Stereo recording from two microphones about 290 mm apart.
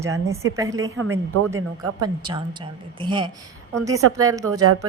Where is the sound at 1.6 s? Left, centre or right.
Right.